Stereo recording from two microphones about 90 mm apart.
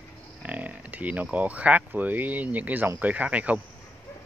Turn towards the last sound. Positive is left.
turn(degrees=-15)  # may be behind; listen again after turning